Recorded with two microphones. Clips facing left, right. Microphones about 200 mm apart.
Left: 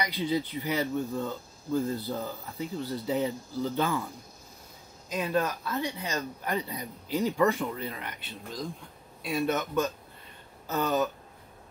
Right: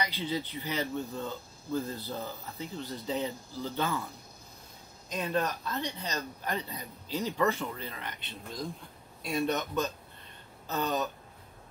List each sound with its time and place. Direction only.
0.0 s speech: 15° left (ahead or behind)
5.1 s speech: 5° left (ahead or behind)